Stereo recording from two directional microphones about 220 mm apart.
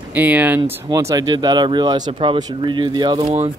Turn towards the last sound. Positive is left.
turn(degrees=-25)  # may be behind; listen again after turning